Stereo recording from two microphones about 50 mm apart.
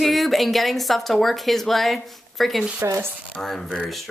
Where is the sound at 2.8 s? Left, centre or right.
Right.